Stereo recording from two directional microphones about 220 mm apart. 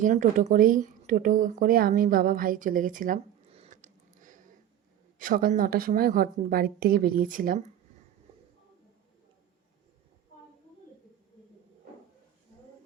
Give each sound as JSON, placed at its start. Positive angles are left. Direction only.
{"t": 0.0, "sound": "a woman's voice", "side_deg": -35}